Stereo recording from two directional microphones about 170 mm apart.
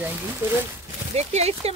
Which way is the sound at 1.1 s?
40° right (ahead or behind).